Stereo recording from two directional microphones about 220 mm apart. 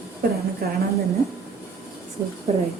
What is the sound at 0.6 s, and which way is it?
Speech, 45° right (ahead or behind).